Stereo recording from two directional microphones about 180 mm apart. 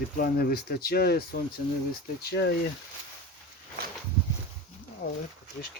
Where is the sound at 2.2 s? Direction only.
65° left (ahead or behind).